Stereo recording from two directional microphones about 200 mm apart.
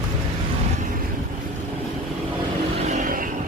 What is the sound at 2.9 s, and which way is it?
Vehicle, 40° right (ahead or behind).